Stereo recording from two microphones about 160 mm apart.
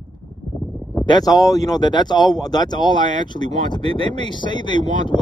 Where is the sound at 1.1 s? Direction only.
25° left (ahead or behind).